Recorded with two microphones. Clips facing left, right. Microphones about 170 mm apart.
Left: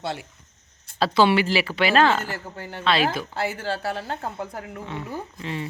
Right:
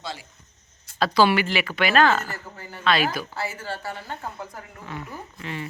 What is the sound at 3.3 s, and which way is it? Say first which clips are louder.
A woman's voice: left 4 dB; 60° left (ahead or behind).